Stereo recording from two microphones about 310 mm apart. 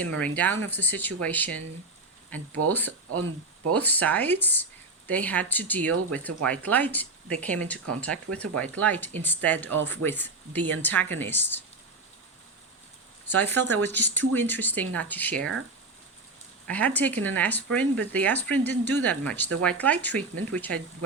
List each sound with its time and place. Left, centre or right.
0.0 s speech: centre
2.6 s speech: centre
3.1 s speech: right
3.8 s speech: centre
13.2 s speech: centre
16.6 s speech: centre